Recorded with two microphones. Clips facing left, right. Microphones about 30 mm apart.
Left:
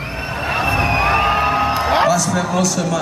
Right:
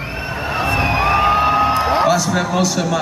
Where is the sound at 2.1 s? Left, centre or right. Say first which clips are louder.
Right 1 dB; centre.